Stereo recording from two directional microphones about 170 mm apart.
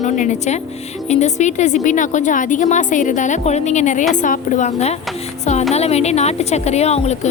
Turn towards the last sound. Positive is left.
turn(degrees=40)  # may be behind; listen again after turning